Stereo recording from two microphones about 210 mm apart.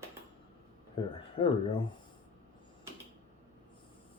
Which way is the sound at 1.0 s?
20° left (ahead or behind).